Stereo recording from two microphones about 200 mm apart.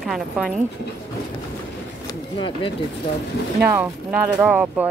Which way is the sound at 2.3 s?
25° left (ahead or behind).